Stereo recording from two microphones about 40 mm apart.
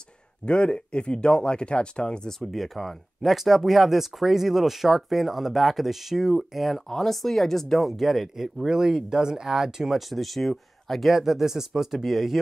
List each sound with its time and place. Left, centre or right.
0.5 s speech: left
2.3 s speech: centre
7.9 s speech: centre
9.9 s speech: centre